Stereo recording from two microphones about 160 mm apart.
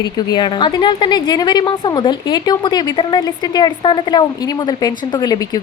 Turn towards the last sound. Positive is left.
turn(degrees=25)  # may be behind; listen again after turning